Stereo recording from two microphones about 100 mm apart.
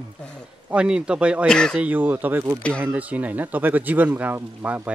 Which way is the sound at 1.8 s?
15° right (ahead or behind).